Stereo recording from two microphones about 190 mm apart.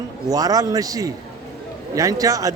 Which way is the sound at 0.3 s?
20° right (ahead or behind).